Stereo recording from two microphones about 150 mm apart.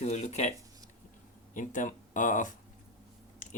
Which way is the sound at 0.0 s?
50° left (ahead or behind).